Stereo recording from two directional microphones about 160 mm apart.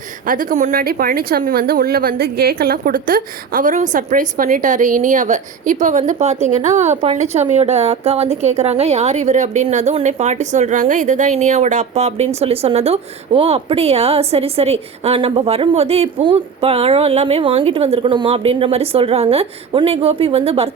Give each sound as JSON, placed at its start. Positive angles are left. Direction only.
{"t": 0.3, "sound": "a woman's voice", "side_deg": -55}
{"t": 0.8, "sound": "a woman's voice", "side_deg": -65}